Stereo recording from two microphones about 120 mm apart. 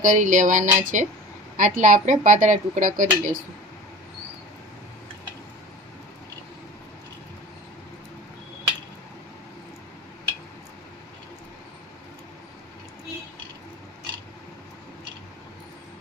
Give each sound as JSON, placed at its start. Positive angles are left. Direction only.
{"t": 0.0, "sound": "speech", "side_deg": -90}